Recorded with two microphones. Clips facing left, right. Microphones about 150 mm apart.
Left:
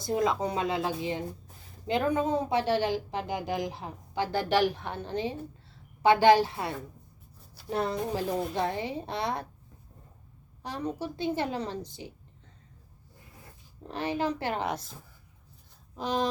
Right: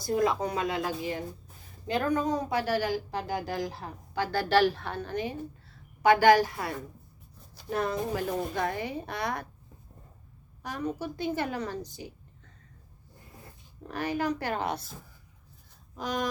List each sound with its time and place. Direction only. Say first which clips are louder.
0.0 s a woman's voice: right 1 dB; 25° left (ahead or behind)
10.6 s a woman's voice: even; 30° left (ahead or behind)
13.8 s a woman's voice: even; 25° left (ahead or behind)
16.0 s a woman's voice: left 2 dB; 30° left (ahead or behind)